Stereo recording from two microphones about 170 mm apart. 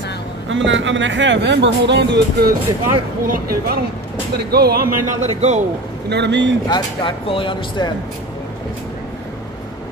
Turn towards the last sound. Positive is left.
turn(degrees=30)  # may be behind; listen again after turning